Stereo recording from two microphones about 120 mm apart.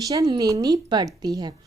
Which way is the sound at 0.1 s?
30° right (ahead or behind).